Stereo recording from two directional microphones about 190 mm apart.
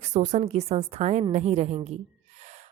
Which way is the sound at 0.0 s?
40° right (ahead or behind).